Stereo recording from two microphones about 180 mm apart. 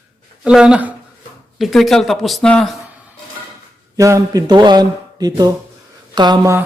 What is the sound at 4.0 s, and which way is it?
Speech, 15° right (ahead or behind).